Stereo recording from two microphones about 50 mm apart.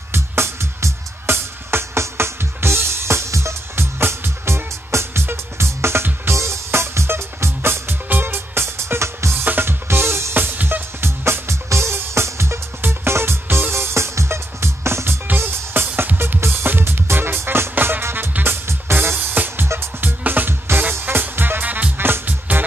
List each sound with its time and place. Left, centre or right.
0.1 s music: right
4.0 s music: right
9.4 s music: right
10.3 s music: right
11.1 s music: right
15.2 s music: right
19.1 s music: right
22.0 s music: right